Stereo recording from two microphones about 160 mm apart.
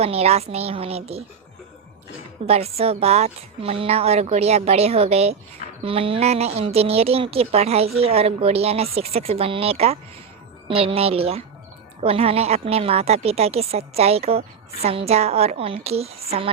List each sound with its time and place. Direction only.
0.0 s a woman's voice: 40° right (ahead or behind)
2.5 s a woman's voice: 40° right (ahead or behind)